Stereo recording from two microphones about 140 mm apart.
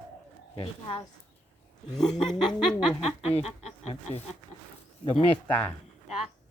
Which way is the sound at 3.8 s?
45° left (ahead or behind).